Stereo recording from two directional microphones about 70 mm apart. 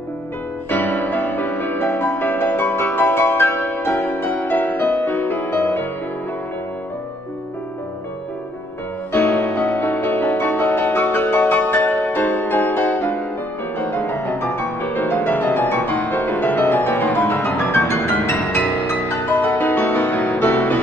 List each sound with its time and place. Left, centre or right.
0.7 s music: left
9.1 s music: left